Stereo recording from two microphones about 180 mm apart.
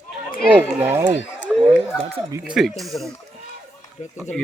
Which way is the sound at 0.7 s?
10° right (ahead or behind).